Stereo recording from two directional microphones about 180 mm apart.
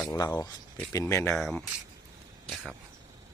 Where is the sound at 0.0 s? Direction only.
20° left (ahead or behind).